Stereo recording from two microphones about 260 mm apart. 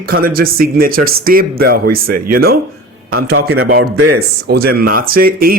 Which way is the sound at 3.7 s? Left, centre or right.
Right.